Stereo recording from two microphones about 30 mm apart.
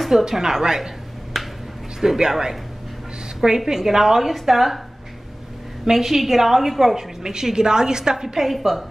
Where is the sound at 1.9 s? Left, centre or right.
Centre.